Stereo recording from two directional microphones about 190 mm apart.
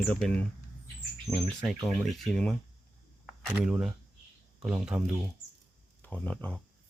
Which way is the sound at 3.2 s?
5° right (ahead or behind).